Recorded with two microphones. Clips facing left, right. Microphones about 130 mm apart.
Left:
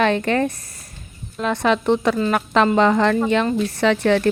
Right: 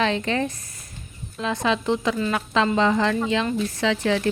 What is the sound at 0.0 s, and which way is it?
A woman's voice, 55° left (ahead or behind).